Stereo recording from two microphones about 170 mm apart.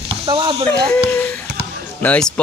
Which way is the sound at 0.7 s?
5° left (ahead or behind).